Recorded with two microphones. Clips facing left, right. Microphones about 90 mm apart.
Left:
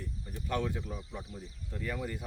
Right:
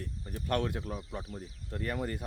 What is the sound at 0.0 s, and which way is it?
Speech, 60° right (ahead or behind).